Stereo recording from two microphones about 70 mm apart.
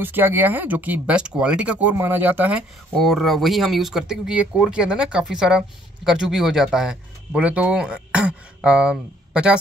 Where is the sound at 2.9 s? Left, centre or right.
Centre.